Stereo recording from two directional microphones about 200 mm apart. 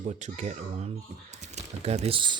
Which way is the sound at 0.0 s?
35° right (ahead or behind).